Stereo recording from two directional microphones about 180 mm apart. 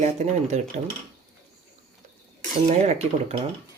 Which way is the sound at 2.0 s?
40° right (ahead or behind).